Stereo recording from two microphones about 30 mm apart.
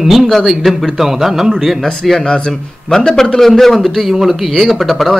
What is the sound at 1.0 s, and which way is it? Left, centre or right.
Speech, centre.